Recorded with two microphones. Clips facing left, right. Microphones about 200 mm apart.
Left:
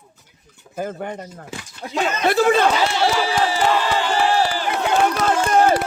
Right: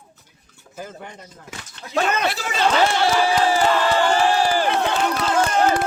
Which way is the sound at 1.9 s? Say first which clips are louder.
Right 1 dB; 60° right (ahead or behind).